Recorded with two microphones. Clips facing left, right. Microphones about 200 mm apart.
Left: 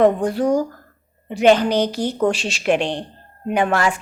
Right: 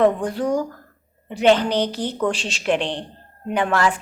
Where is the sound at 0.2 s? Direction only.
10° left (ahead or behind).